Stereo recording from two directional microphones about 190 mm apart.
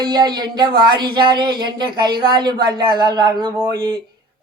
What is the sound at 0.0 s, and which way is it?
Speech, 25° right (ahead or behind).